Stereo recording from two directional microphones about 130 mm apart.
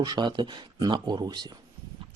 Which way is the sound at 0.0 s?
35° right (ahead or behind).